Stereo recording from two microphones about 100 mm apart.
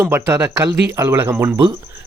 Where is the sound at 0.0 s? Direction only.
20° right (ahead or behind).